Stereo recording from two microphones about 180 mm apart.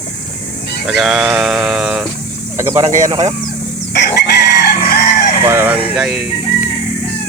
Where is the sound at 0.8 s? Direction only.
Centre (ahead or behind).